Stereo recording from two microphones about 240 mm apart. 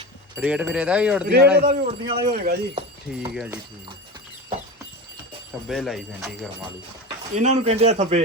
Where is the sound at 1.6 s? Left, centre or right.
Right.